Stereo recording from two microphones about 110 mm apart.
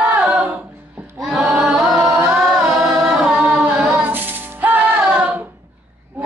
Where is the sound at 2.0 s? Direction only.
20° right (ahead or behind).